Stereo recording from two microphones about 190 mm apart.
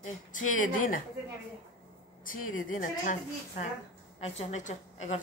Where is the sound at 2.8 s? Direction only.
45° left (ahead or behind).